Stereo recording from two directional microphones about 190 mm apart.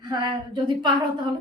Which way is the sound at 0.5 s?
25° right (ahead or behind).